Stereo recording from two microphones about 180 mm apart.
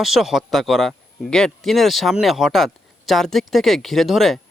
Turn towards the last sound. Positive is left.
turn(degrees=0)  # may be behind; listen again after turning